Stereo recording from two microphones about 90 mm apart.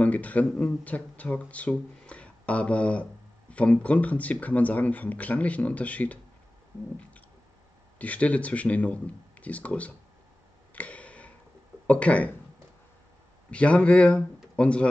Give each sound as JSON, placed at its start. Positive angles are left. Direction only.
{"t": 0.0, "sound": "speech", "side_deg": 15}
{"t": 8.0, "sound": "speech", "side_deg": 15}
{"t": 10.7, "sound": "a sound", "side_deg": 15}
{"t": 11.9, "sound": "speech", "side_deg": 15}
{"t": 13.5, "sound": "speech", "side_deg": 15}